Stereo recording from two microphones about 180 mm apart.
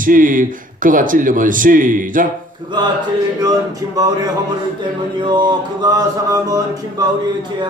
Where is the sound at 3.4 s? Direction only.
20° right (ahead or behind).